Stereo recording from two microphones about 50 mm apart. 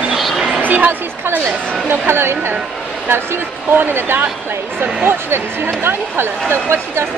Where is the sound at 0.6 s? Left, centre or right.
Right.